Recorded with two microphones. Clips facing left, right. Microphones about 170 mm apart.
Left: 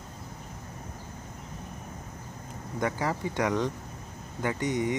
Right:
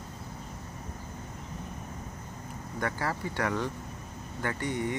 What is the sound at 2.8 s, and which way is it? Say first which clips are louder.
Speech: left 3 dB; 15° left (ahead or behind).